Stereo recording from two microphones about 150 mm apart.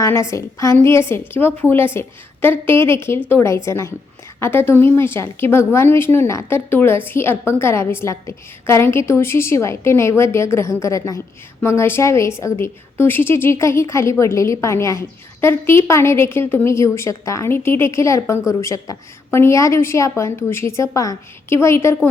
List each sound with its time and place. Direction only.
0.0 s a woman's voice: 20° left (ahead or behind)